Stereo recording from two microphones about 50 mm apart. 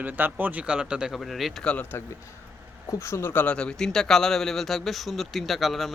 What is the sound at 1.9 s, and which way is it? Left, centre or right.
Speech, left.